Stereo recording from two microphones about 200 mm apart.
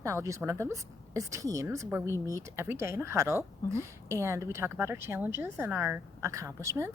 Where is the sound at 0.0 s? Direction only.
15° right (ahead or behind).